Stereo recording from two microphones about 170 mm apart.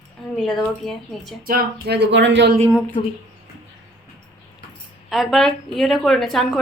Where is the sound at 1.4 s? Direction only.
65° right (ahead or behind); by 2.5 s 90° right.